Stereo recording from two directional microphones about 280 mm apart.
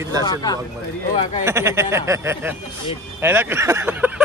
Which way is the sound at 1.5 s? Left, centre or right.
Centre.